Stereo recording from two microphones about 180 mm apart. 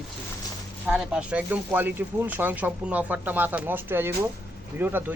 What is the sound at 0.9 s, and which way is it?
Speech, 5° right (ahead or behind).